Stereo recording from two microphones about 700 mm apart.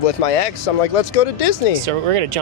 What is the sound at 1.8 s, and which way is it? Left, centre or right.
Speech, right.